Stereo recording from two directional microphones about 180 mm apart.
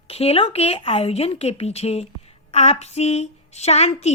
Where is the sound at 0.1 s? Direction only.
35° left (ahead or behind).